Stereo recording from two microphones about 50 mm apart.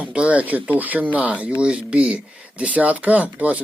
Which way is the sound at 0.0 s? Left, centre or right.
Right.